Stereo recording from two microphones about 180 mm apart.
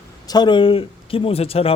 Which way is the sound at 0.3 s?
25° left (ahead or behind).